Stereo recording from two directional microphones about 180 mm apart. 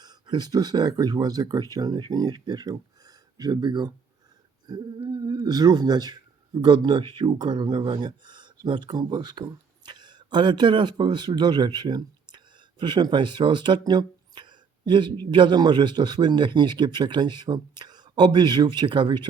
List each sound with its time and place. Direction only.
0.0 s a man's voice: 25° right (ahead or behind)